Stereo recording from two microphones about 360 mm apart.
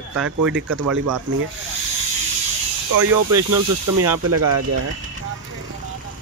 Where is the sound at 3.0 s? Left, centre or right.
Right.